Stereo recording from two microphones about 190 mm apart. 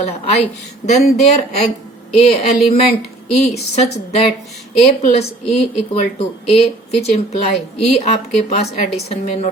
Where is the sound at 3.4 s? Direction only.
35° left (ahead or behind).